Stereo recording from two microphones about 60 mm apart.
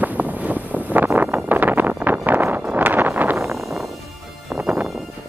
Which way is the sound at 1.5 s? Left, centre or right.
Right.